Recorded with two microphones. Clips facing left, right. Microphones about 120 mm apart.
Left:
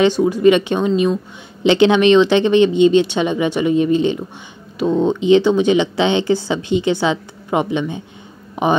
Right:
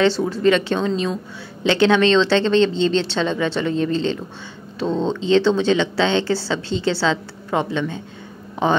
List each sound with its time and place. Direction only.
0.0 s speech: 15° left (ahead or behind)